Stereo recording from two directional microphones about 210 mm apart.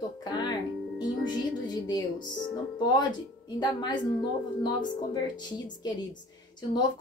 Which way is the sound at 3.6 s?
20° left (ahead or behind).